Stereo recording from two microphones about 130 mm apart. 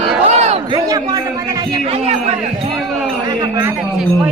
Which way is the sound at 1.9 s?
55° right (ahead or behind).